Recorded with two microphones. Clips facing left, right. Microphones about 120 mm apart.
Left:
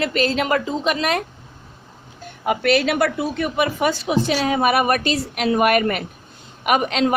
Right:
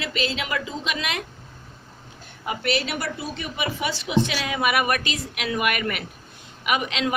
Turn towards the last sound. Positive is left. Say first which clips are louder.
# left 6 dB
turn(degrees=45)  # may be behind; listen again after turning